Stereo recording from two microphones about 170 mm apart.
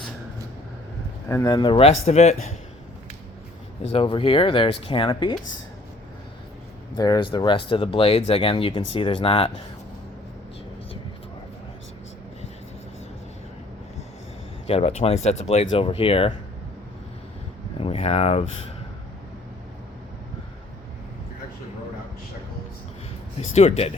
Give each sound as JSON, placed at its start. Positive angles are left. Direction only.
{"t": 1.3, "sound": "speech", "side_deg": 20}
{"t": 3.8, "sound": "speech", "side_deg": 30}
{"t": 6.9, "sound": "speech", "side_deg": 25}
{"t": 14.7, "sound": "speech", "side_deg": 35}
{"t": 17.7, "sound": "a sound", "side_deg": 35}
{"t": 23.4, "sound": "speech", "side_deg": 40}